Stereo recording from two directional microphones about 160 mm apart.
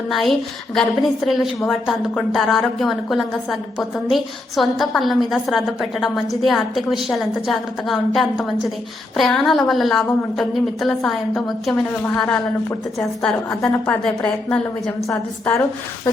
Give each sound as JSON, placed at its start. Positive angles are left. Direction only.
{"t": 0.1, "sound": "a woman's voice", "side_deg": 0}
{"t": 15.0, "sound": "a woman's voice", "side_deg": 20}